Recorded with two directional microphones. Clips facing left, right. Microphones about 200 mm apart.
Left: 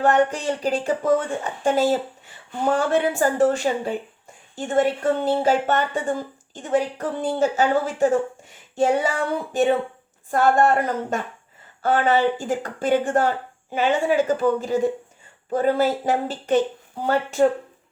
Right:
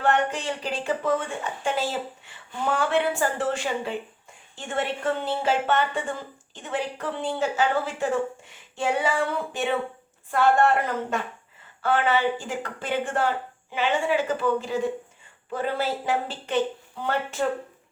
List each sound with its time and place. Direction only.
0.0 s a woman's voice: 40° left (ahead or behind)